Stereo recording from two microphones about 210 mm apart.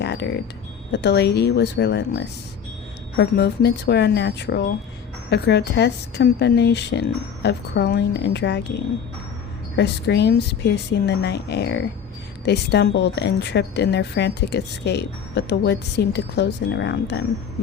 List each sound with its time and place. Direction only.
0.0 s music: 55° left (ahead or behind)
0.9 s speech: 55° left (ahead or behind)
9.7 s speech: 55° left (ahead or behind)